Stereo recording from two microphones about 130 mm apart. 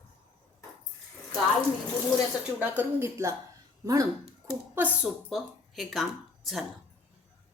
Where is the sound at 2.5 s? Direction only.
15° right (ahead or behind).